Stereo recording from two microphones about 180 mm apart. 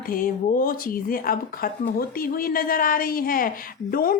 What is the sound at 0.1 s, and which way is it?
A man's voice, 50° left (ahead or behind).